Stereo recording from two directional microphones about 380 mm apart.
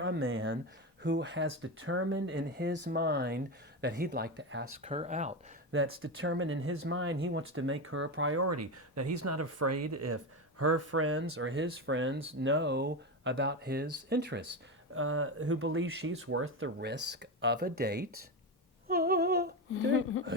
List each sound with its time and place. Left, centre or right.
0.0 s speech: right
4.8 s speech: centre
5.7 s speech: right
18.9 s humming: right